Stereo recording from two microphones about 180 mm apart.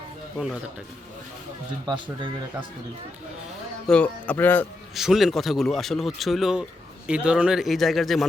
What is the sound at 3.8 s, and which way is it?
Speech, 5° left (ahead or behind).